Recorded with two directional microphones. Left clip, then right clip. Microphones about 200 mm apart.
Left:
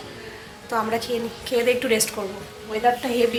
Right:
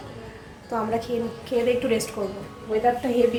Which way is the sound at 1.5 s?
Centre (ahead or behind).